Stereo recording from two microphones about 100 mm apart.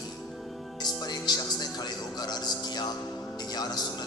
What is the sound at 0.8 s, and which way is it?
Speech, 40° left (ahead or behind).